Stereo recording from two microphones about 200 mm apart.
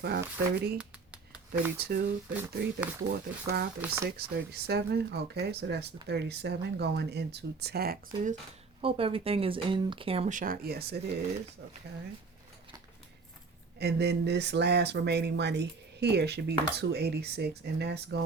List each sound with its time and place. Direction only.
0.0 s speech: 55° right (ahead or behind)
0.8 s a sound: 5° right (ahead or behind)
2.3 s speech: 10° right (ahead or behind)
3.1 s speech: 50° right (ahead or behind)
3.8 s speech: 10° right (ahead or behind)
4.4 s speech: 50° right (ahead or behind)
8.8 s speech: 30° right (ahead or behind); by 11.0 s 50° right (ahead or behind)
13.7 s speech: 55° right (ahead or behind)